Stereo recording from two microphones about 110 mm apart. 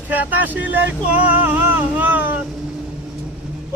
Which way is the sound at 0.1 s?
15° right (ahead or behind).